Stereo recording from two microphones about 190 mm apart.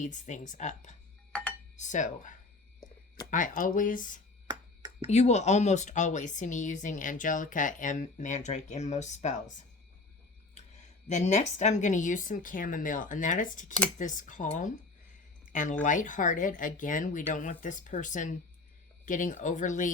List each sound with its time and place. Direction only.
0.0 s speech: 40° left (ahead or behind)
1.3 s dishes: 5° left (ahead or behind)
1.7 s a woman's voice: 40° left (ahead or behind)
4.4 s a sound: 20° right (ahead or behind)
5.0 s speech: 35° left (ahead or behind)
11.1 s a woman's voice: 40° left (ahead or behind)
15.4 s a sound: 40° left (ahead or behind)
15.8 s a woman's voice: 45° left (ahead or behind)